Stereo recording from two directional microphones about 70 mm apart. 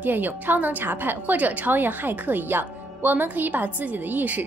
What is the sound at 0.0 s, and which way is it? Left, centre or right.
A woman's voice, right.